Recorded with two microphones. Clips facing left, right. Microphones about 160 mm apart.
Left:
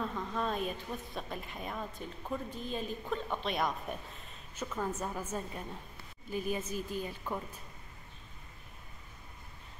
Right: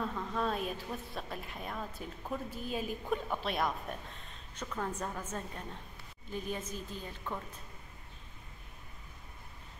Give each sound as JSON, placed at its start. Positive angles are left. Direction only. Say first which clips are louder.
{"t": 0.0, "sound": "a woman's voice", "louder": "even", "side_deg": 0}